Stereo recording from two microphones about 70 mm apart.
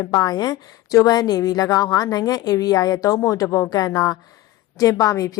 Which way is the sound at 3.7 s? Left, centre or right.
Left.